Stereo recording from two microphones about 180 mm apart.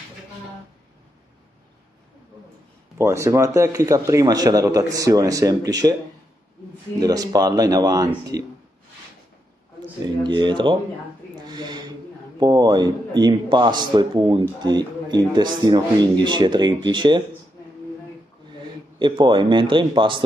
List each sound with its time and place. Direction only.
3.0 s a man's voice: 15° right (ahead or behind)
7.0 s a man's voice: 20° right (ahead or behind)
9.8 s a man's voice: 25° right (ahead or behind)
11.3 s a sound: 25° right (ahead or behind)
12.4 s a man's voice: 20° right (ahead or behind)
18.9 s a man's voice: 25° right (ahead or behind)